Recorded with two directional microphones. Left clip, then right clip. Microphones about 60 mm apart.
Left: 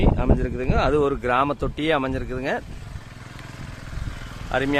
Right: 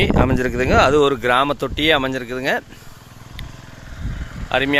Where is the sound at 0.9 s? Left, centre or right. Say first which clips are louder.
Right 5 dB; right.